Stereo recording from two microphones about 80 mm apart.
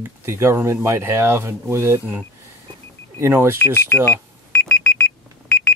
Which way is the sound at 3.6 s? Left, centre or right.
Left.